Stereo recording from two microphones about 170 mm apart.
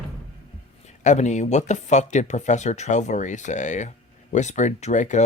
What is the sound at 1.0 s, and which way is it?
Speech, 45° left (ahead or behind).